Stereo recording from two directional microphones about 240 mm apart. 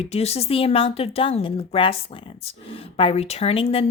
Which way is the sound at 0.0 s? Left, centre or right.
Left.